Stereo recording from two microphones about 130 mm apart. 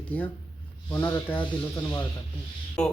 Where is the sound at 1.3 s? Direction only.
20° left (ahead or behind).